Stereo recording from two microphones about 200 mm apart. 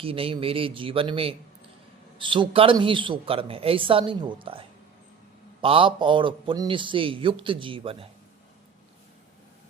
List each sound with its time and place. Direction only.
0.0 s a man's voice: 30° right (ahead or behind)
5.6 s a man's voice: 25° right (ahead or behind)